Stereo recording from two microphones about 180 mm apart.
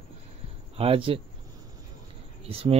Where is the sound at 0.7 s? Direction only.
30° right (ahead or behind).